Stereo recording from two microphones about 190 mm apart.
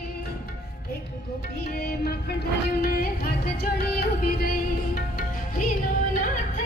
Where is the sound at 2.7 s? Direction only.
50° left (ahead or behind).